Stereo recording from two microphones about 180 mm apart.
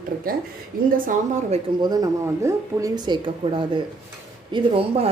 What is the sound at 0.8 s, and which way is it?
Speech, 55° right (ahead or behind).